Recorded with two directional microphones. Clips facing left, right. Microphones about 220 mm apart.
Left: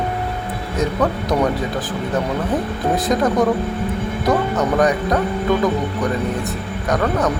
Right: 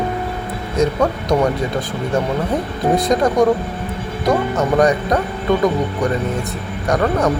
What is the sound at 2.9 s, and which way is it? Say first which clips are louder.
Speech: right 2 dB; centre (ahead or behind).